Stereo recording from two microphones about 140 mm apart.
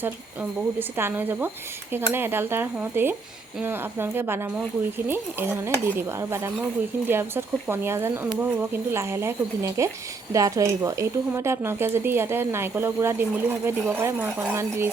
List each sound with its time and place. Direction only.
0.8 s a woman's voice: 15° right (ahead or behind)